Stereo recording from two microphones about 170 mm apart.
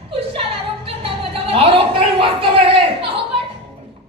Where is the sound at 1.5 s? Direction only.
30° right (ahead or behind).